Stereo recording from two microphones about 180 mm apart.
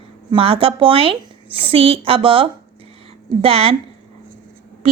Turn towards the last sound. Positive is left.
turn(degrees=-30)  # may be behind; listen again after turning